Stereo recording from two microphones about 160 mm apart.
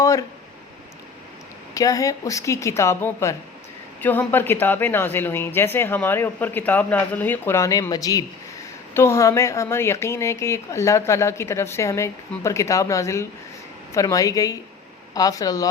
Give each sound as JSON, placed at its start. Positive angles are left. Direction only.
{"t": 0.0, "sound": "speech", "side_deg": 20}
{"t": 1.7, "sound": "speech", "side_deg": 20}